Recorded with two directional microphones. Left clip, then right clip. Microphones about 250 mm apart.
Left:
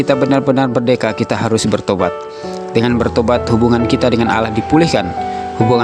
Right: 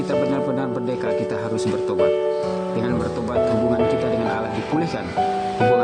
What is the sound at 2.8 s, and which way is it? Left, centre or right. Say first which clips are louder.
Speech: left 10 dB; left.